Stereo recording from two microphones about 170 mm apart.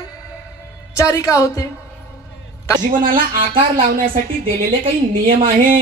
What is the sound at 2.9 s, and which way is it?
Speech, 55° right (ahead or behind).